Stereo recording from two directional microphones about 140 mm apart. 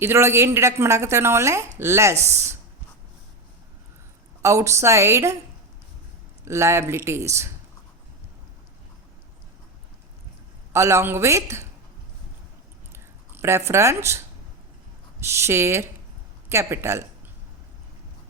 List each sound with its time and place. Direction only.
0.0 s a woman's voice: 20° right (ahead or behind)
4.4 s a woman's voice: 20° right (ahead or behind)
6.4 s a woman's voice: 20° right (ahead or behind)
10.7 s a woman's voice: 20° right (ahead or behind)
12.9 s a sound: 20° right (ahead or behind)
15.2 s a woman's voice: 20° right (ahead or behind)